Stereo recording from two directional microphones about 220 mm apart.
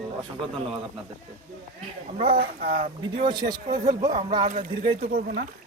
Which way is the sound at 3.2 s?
20° right (ahead or behind).